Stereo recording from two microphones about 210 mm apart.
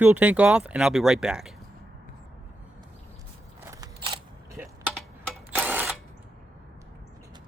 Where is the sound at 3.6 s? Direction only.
15° right (ahead or behind).